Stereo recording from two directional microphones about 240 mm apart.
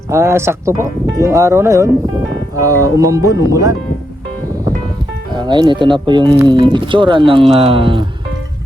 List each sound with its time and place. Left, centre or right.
0.1 s speech: centre
5.4 s speech: centre